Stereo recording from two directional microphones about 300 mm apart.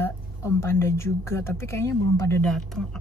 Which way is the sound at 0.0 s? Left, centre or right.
Centre.